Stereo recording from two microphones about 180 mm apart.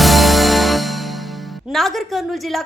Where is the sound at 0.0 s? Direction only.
Centre (ahead or behind).